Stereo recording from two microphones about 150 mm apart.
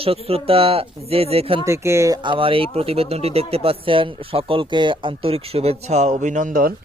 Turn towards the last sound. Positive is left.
turn(degrees=-65)  # may be behind; listen again after turning